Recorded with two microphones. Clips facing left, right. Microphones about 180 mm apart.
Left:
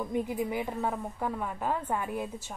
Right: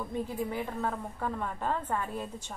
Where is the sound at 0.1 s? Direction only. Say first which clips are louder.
Left 2 dB; 15° left (ahead or behind).